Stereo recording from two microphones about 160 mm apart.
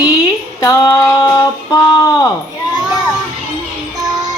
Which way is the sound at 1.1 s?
20° left (ahead or behind).